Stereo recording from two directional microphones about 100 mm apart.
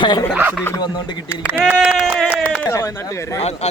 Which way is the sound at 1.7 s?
10° right (ahead or behind).